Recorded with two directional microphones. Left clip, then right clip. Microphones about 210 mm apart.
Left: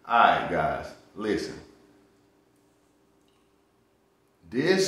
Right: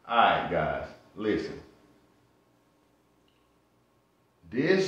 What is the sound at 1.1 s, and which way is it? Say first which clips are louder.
Speech: right 1 dB; 15° left (ahead or behind).